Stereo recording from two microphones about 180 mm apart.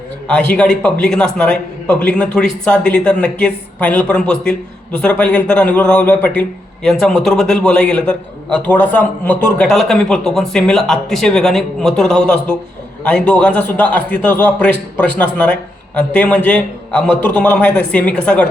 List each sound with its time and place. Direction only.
0.3 s a man's voice: 5° left (ahead or behind)